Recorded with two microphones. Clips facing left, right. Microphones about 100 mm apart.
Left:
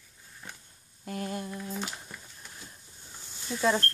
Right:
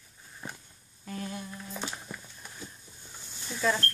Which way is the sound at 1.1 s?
45° left (ahead or behind).